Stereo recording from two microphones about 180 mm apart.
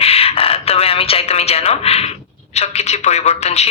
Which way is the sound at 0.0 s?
35° left (ahead or behind).